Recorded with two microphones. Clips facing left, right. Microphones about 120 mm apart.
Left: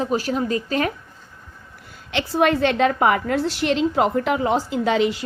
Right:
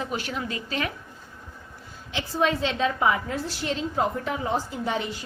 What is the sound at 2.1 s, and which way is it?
A woman's voice, 70° left (ahead or behind).